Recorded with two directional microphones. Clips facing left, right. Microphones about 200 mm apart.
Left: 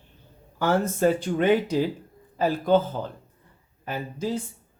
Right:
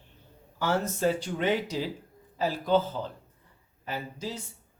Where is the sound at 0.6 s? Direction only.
55° left (ahead or behind).